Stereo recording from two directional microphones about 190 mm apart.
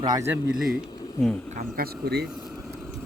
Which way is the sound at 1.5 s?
55° right (ahead or behind).